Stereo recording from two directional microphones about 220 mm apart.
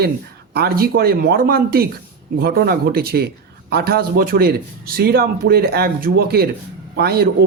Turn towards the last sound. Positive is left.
turn(degrees=-45)  # may be behind; listen again after turning